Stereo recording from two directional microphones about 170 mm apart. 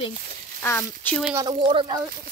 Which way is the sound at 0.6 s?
15° left (ahead or behind).